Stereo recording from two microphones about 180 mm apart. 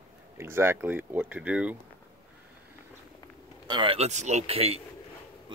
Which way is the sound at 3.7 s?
30° right (ahead or behind).